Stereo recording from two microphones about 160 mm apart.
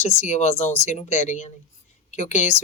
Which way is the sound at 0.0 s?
45° left (ahead or behind).